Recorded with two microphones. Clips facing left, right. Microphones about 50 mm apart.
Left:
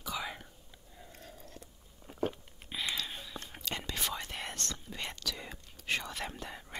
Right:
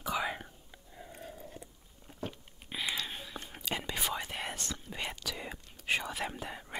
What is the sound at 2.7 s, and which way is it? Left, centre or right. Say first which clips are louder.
Whispering: right 1 dB; centre.